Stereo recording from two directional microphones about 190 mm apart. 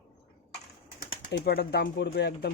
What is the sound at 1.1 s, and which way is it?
A man's voice, 65° left (ahead or behind).